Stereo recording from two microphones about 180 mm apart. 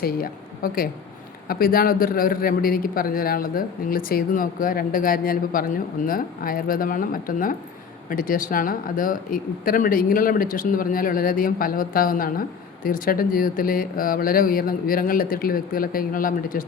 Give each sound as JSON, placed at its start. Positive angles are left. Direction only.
{"t": 0.0, "sound": "a woman's voice", "side_deg": 55}